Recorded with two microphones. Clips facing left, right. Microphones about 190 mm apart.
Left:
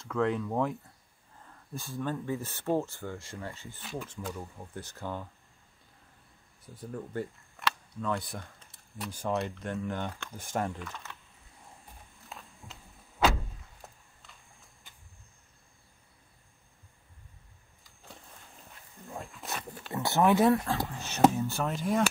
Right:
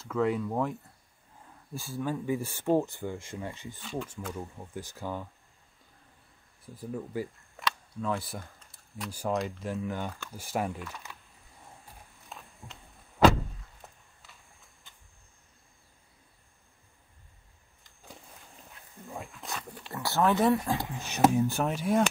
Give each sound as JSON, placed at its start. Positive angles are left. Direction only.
{"t": 0.0, "sound": "speech", "side_deg": -5}
{"t": 6.9, "sound": "speech", "side_deg": -5}
{"t": 12.3, "sound": "walk", "side_deg": 0}
{"t": 14.2, "sound": "a sound", "side_deg": 0}
{"t": 17.8, "sound": "a sound", "side_deg": 0}
{"t": 19.0, "sound": "dog", "side_deg": 0}
{"t": 19.9, "sound": "a sound", "side_deg": 20}
{"t": 20.3, "sound": "speech", "side_deg": 0}
{"t": 20.6, "sound": "speech", "side_deg": -15}
{"t": 21.6, "sound": "speech", "side_deg": 0}